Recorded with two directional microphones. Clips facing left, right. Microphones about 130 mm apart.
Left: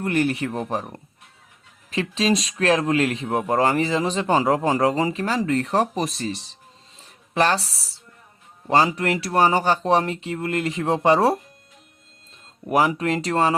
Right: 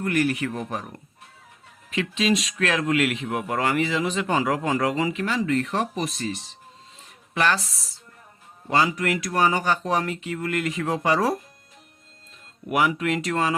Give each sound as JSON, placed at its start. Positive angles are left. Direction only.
{"t": 0.0, "sound": "a man's voice", "side_deg": 30}
{"t": 7.0, "sound": "a sound", "side_deg": 35}
{"t": 8.6, "sound": "speech", "side_deg": 35}
{"t": 12.6, "sound": "a man's voice", "side_deg": 35}